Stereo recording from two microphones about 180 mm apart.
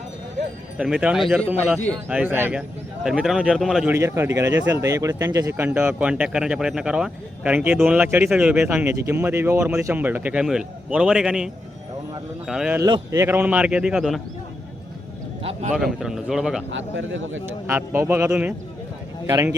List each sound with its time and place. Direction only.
0.8 s a man's voice: 5° right (ahead or behind)
3.9 s a man's voice: 15° right (ahead or behind)
12.8 s speech: 20° right (ahead or behind); by 14.2 s centre (ahead or behind)
15.7 s a man's voice: 5° right (ahead or behind)
16.7 s speech: 90° right
17.4 s speech: 15° right (ahead or behind)